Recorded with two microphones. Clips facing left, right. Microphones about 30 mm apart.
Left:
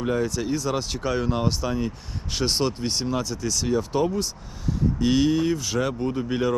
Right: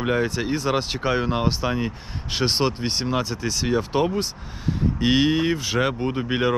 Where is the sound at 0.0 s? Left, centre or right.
Right.